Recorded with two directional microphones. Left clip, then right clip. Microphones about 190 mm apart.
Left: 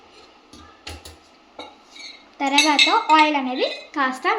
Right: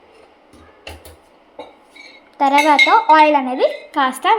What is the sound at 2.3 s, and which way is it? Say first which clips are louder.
Speech: right 5 dB; 20° right (ahead or behind).